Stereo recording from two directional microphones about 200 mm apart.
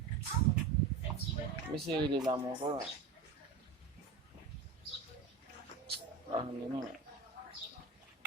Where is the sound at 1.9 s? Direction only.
20° right (ahead or behind).